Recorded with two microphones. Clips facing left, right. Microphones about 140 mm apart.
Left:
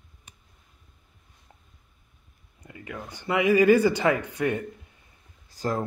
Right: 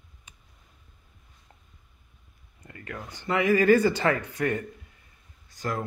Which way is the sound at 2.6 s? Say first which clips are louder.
Left 1 dB; 10° left (ahead or behind).